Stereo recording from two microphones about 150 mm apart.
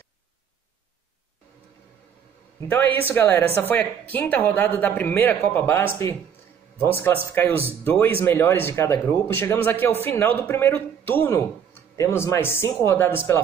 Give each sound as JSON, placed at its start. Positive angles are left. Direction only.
{"t": 3.0, "sound": "a man's voice", "side_deg": 15}